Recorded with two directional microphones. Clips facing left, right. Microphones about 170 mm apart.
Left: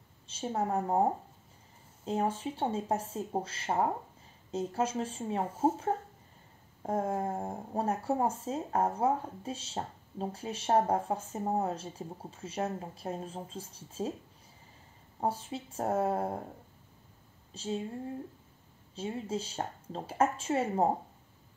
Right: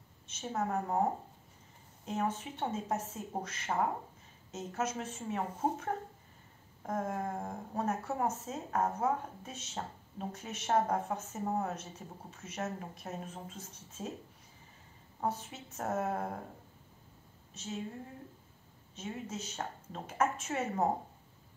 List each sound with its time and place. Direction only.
0.3 s speech: 30° left (ahead or behind)
2.0 s speech: 30° left (ahead or behind)
15.1 s speech: 30° left (ahead or behind)
17.5 s speech: 30° left (ahead or behind)
18.9 s speech: 30° left (ahead or behind)